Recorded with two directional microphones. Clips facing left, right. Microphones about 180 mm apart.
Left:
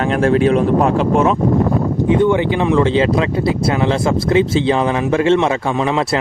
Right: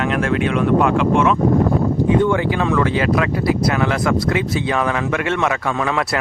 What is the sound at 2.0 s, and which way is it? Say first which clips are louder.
Speech: left 5 dB; 20° left (ahead or behind).